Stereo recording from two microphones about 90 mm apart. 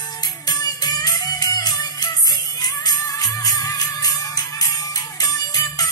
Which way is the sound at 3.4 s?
40° left (ahead or behind).